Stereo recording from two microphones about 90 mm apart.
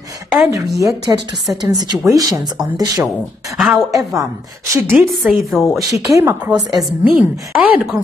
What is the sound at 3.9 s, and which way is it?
Speech, 40° right (ahead or behind).